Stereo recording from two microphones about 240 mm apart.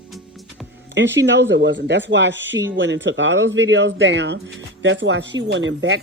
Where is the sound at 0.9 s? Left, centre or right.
Right.